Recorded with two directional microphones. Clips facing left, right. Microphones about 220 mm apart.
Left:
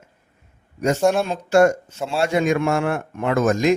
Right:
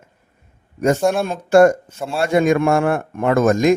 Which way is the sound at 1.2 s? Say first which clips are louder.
Right 4 dB; 55° right (ahead or behind).